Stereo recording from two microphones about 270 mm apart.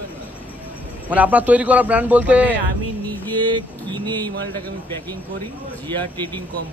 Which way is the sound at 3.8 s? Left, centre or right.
Centre.